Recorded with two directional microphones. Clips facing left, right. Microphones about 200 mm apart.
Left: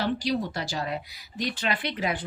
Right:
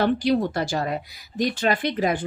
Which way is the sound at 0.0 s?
55° right (ahead or behind).